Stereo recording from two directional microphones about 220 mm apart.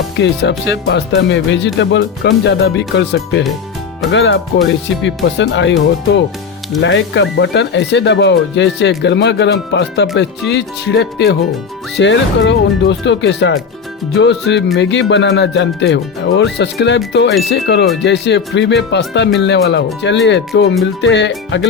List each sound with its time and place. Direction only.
0.2 s speech: 55° left (ahead or behind)